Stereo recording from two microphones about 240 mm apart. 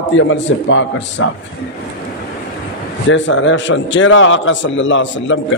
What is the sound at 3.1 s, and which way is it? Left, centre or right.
A man's voice, left.